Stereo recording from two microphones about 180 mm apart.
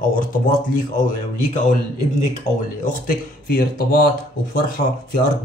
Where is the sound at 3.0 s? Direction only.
55° left (ahead or behind).